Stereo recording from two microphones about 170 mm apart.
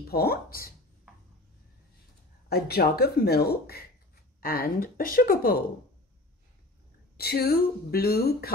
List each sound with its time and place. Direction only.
0.1 s speech: 65° left (ahead or behind)
2.5 s speech: 70° left (ahead or behind)
7.2 s speech: 65° left (ahead or behind)